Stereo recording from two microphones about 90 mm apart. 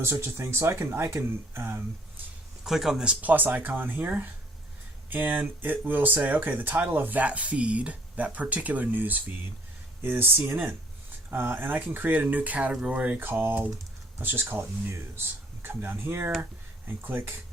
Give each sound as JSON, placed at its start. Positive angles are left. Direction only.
{"t": 0.0, "sound": "speech", "side_deg": -30}
{"t": 2.6, "sound": "speech", "side_deg": -5}